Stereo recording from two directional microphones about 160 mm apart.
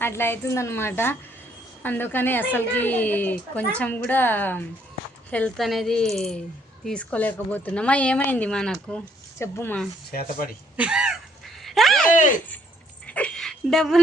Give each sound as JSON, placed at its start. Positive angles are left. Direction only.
{"t": 0.0, "sound": "a woman's voice", "side_deg": 15}
{"t": 9.4, "sound": "a woman's voice", "side_deg": 15}
{"t": 10.1, "sound": "speech", "side_deg": 65}
{"t": 10.8, "sound": "a sound", "side_deg": -5}
{"t": 12.1, "sound": "speech", "side_deg": 50}
{"t": 13.1, "sound": "a sound", "side_deg": 10}